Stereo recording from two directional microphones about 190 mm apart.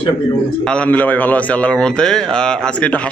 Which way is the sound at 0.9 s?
10° left (ahead or behind).